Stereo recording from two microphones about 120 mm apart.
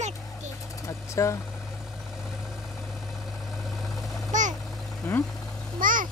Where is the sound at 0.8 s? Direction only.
25° left (ahead or behind).